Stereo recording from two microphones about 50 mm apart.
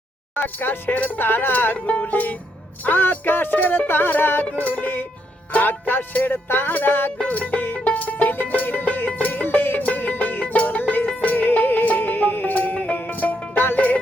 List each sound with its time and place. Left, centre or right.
0.4 s music: left
13.5 s music: left
13.7 s music: left